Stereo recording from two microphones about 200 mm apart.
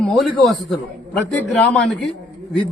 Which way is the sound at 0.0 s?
Centre (ahead or behind).